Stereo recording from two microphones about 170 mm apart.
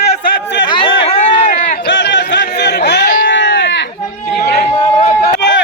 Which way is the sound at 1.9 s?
90° left.